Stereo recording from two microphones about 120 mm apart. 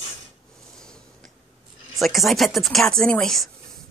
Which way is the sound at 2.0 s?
Centre (ahead or behind).